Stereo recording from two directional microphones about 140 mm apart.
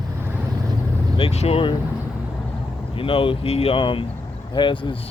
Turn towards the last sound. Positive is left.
turn(degrees=35)  # may be behind; listen again after turning